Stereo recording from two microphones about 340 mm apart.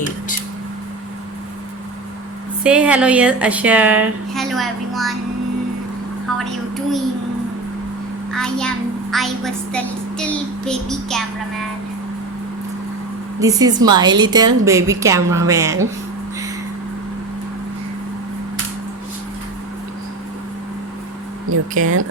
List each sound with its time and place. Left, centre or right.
2.6 s a woman's voice: centre
8.3 s a child's voice: centre
13.4 s a woman's voice: centre
21.5 s speech: right